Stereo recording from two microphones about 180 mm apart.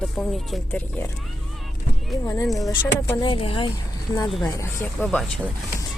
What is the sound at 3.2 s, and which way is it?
Speech, 30° left (ahead or behind).